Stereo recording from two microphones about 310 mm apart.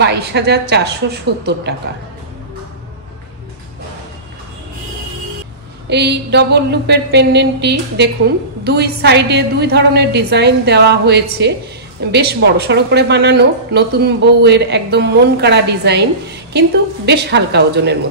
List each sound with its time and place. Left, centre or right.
0.0 s a woman's voice: right
5.9 s a woman's voice: right